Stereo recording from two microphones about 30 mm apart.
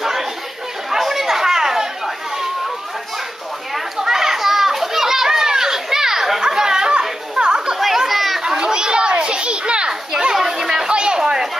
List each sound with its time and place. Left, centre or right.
0.0 s chatter: centre
4.0 s children playing: centre
6.4 s chatter: right
8.1 s chatter: centre
8.6 s children playing: right
9.8 s children playing: centre
10.9 s a sound: right